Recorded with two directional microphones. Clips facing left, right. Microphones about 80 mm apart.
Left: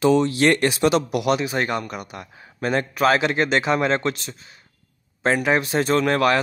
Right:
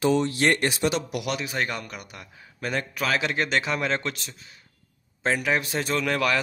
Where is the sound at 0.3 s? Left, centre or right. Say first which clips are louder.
Left 5 dB; left.